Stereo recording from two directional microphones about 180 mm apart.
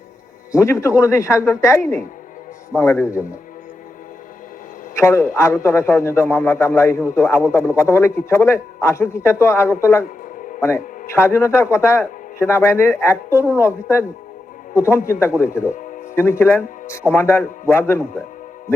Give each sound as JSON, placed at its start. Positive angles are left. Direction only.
{"t": 0.5, "sound": "a man's voice", "side_deg": 15}
{"t": 4.9, "sound": "a man's voice", "side_deg": 15}